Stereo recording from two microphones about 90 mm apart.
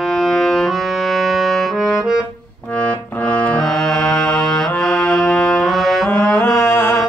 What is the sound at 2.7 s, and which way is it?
Music, 15° left (ahead or behind).